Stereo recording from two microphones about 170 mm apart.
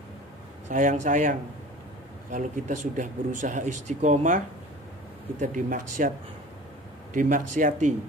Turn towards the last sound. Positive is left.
turn(degrees=-45)  # may be behind; listen again after turning